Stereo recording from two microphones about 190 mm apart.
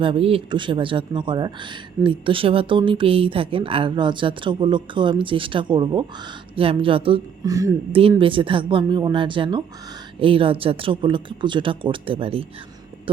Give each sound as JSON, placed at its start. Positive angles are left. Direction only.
{"t": 0.0, "sound": "a woman's voice", "side_deg": -30}
{"t": 7.5, "sound": "speech", "side_deg": -15}
{"t": 8.2, "sound": "a woman's voice", "side_deg": -25}